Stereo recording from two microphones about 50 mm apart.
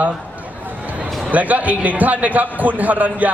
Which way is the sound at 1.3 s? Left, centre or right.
Right.